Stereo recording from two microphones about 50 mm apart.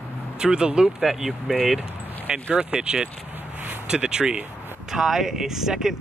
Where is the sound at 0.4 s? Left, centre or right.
Centre.